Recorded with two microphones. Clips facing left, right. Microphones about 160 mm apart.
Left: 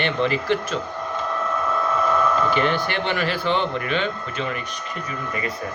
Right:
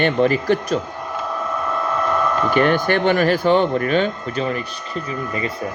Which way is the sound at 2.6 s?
50° right (ahead or behind).